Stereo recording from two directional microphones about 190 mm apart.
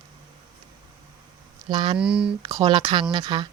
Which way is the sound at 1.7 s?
25° right (ahead or behind).